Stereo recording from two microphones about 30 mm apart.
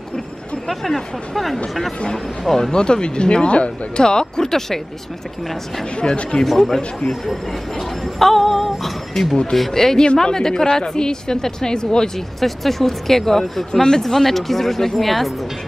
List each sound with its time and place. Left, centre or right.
0.7 s speech: centre
2.7 s speech: left
4.0 s speech: left
4.5 s speech: centre
6.3 s speech: left
8.0 s speech: centre; by 12.1 s left
12.4 s speech: centre
13.7 s speech: left
14.0 s speech: centre